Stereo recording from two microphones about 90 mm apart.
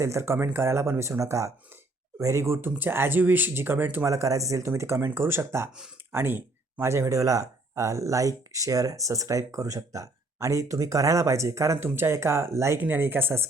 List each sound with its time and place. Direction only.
0.0 s speech: 30° right (ahead or behind)
4.0 s speech: 35° right (ahead or behind)